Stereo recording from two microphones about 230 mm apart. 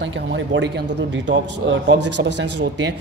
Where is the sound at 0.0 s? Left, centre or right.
Right.